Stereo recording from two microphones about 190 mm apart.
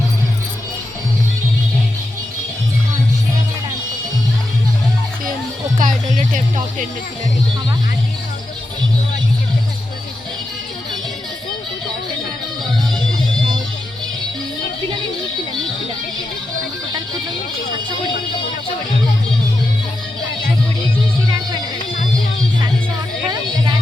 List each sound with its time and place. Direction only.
5.8 s music: 45° right (ahead or behind)